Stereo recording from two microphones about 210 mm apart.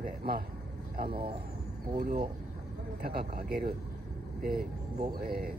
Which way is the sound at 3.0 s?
45° right (ahead or behind).